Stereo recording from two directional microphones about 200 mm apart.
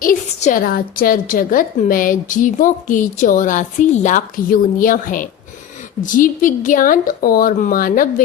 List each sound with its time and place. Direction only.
0.0 s a woman's voice: 40° left (ahead or behind)